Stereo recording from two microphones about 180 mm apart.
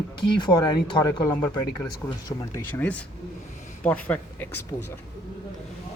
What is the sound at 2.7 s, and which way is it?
Speech, 10° left (ahead or behind).